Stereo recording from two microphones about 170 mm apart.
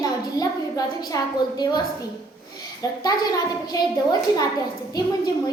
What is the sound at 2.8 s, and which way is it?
Speech, 20° left (ahead or behind).